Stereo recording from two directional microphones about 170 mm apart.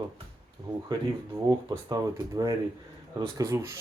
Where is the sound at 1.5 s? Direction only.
20° right (ahead or behind).